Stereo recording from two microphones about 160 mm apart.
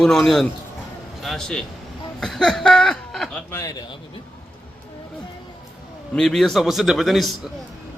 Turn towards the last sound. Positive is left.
turn(degrees=0)  # may be behind; listen again after turning